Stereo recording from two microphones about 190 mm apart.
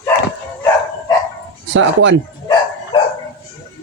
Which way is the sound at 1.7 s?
70° right (ahead or behind).